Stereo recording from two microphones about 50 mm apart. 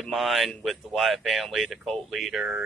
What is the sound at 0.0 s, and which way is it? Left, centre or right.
Speech, centre.